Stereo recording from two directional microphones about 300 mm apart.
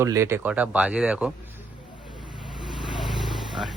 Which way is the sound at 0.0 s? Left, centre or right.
Centre.